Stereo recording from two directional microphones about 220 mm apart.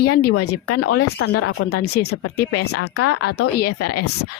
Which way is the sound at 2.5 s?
90° left.